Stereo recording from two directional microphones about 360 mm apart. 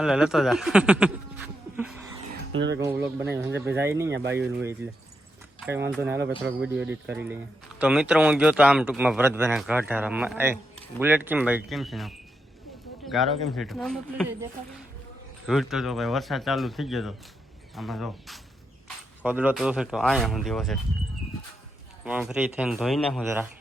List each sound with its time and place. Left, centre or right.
0.0 s a man's voice: centre
1.7 s a sound: centre
2.5 s music: right
2.7 s a man's voice: centre
15.4 s a man's voice: centre
22.0 s a man's voice: centre